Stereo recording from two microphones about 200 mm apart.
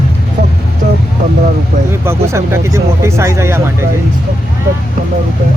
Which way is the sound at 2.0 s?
15° right (ahead or behind).